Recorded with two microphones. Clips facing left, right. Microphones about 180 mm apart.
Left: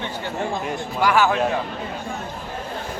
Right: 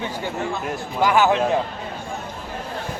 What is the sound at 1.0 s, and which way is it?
Speech, 20° right (ahead or behind).